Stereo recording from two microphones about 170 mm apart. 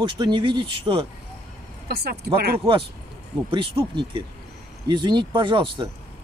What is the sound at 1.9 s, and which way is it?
Speech, 65° right (ahead or behind).